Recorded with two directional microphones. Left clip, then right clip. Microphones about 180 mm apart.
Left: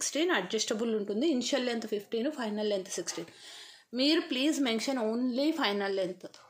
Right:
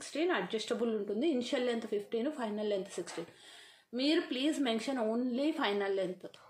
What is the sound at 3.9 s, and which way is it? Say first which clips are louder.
Speech: left 4 dB; 35° left (ahead or behind).